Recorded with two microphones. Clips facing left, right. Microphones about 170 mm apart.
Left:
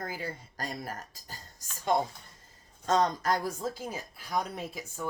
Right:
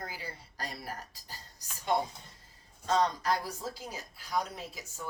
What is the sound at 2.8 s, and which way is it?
Speech, 45° left (ahead or behind).